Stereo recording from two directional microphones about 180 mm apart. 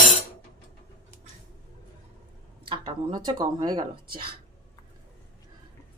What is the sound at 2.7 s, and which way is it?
Speech, 25° right (ahead or behind).